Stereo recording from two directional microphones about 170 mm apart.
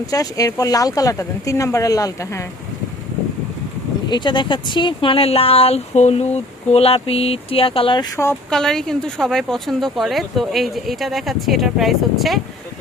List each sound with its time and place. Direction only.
0.1 s speech: 20° left (ahead or behind)
4.1 s speech: 25° left (ahead or behind)
8.1 s speech: 15° left (ahead or behind)
8.4 s speech: 5° left (ahead or behind)